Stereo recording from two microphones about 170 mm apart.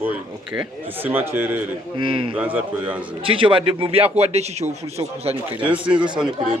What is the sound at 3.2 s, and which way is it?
A man's voice, 30° right (ahead or behind).